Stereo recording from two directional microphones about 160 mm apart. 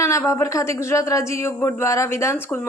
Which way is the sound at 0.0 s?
20° left (ahead or behind).